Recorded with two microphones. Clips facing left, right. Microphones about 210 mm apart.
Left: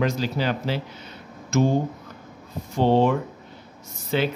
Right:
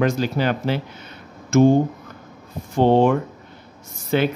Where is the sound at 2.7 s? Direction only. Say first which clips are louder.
Right 4 dB; 50° right (ahead or behind).